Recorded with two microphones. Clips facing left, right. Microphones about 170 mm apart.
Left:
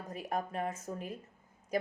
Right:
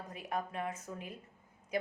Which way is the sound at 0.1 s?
45° left (ahead or behind).